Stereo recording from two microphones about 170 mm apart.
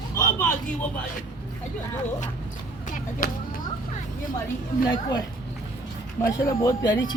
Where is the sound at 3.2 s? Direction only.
55° left (ahead or behind).